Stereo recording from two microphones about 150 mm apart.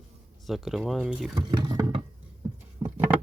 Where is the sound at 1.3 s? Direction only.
30° right (ahead or behind).